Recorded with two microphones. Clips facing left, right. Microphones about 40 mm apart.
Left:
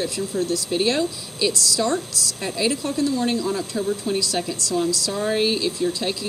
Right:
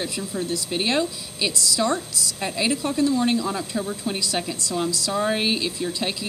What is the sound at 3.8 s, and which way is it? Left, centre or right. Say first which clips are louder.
Speech: left 4 dB; centre.